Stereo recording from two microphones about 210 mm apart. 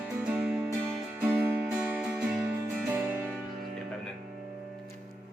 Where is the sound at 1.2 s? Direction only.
10° right (ahead or behind).